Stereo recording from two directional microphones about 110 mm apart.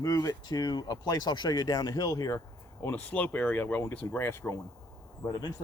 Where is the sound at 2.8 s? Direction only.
15° left (ahead or behind).